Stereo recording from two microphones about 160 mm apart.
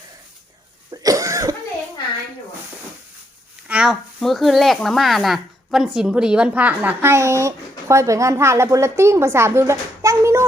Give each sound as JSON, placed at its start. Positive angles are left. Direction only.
{"t": 0.9, "sound": "cough", "side_deg": -20}
{"t": 3.7, "sound": "speech", "side_deg": -5}